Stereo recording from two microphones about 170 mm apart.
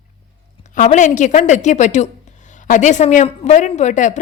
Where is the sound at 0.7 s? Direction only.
45° left (ahead or behind).